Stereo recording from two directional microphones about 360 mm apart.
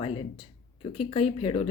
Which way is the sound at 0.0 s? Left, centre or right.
Centre.